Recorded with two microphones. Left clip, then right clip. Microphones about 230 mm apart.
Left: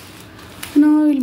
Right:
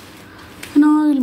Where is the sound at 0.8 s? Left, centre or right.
Centre.